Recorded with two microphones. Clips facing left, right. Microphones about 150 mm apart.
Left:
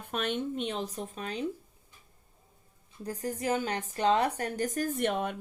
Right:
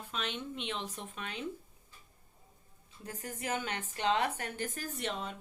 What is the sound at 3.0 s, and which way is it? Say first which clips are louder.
Speech: left 8 dB; 35° left (ahead or behind).